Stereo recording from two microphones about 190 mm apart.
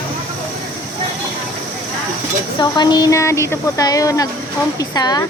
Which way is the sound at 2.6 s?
20° left (ahead or behind).